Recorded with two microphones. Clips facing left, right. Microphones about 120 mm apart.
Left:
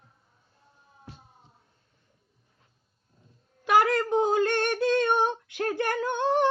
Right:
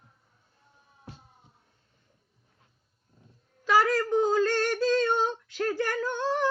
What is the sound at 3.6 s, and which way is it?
Female singing, 20° left (ahead or behind).